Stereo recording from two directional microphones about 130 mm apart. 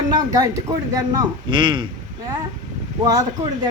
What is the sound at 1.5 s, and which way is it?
Speech, 40° right (ahead or behind).